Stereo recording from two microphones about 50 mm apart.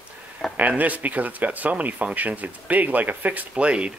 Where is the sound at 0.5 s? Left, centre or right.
Right.